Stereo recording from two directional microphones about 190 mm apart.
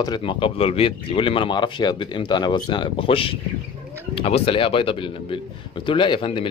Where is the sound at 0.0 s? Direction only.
25° left (ahead or behind).